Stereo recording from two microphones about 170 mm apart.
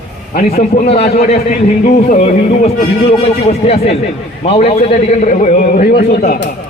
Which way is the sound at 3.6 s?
35° left (ahead or behind).